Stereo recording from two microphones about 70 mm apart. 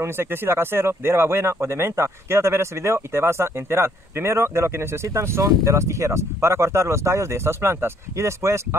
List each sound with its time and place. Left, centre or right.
0.0 s speech: right